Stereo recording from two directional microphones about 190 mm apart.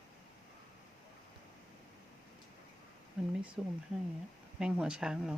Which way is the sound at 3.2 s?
5° right (ahead or behind).